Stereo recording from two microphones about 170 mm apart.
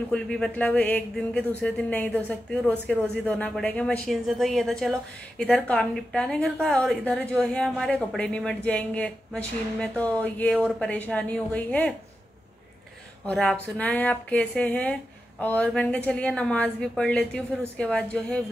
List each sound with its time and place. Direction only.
0.1 s a woman's voice: 5° left (ahead or behind)
13.3 s a woman's voice: 5° left (ahead or behind)